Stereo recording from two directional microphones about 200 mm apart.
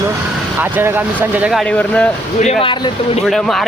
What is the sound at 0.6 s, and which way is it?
Speech, 10° right (ahead or behind).